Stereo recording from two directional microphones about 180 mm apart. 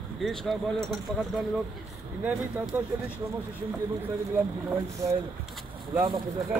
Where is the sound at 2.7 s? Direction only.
10° right (ahead or behind).